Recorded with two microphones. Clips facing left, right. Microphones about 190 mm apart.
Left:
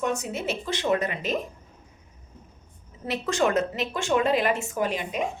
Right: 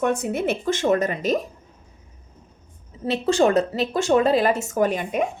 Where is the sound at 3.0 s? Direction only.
30° right (ahead or behind).